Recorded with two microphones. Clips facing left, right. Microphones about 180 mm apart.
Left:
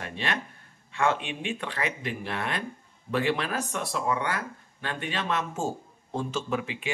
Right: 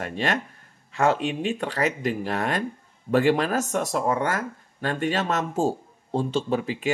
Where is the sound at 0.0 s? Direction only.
45° right (ahead or behind).